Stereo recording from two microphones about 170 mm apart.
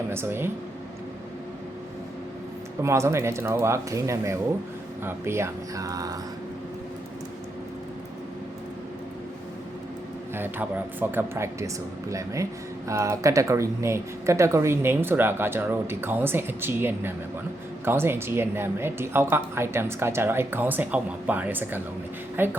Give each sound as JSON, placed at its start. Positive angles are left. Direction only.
{"t": 0.1, "sound": "speech", "side_deg": -15}
{"t": 2.8, "sound": "speech", "side_deg": -15}
{"t": 10.3, "sound": "speech", "side_deg": -10}